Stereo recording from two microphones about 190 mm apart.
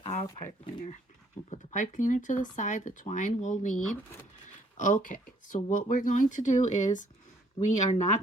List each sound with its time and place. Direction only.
0.0 s speech: 30° left (ahead or behind)
1.5 s speech: 40° left (ahead or behind)